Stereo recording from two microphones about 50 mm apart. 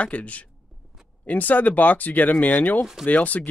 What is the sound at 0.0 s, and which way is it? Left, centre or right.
Speech, left.